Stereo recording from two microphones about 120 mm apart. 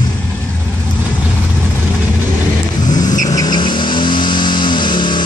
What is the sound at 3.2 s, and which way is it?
Vehicle, 30° left (ahead or behind).